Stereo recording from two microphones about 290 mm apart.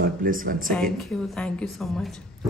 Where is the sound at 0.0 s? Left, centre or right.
Right.